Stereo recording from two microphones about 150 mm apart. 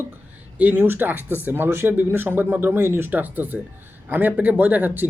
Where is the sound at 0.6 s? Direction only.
10° right (ahead or behind).